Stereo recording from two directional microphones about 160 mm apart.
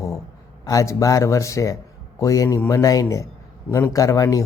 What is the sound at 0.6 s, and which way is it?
A man's voice, 20° left (ahead or behind).